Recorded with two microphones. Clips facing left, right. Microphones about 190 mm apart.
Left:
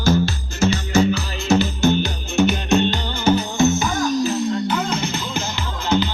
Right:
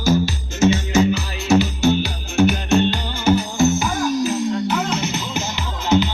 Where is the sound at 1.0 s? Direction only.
10° right (ahead or behind).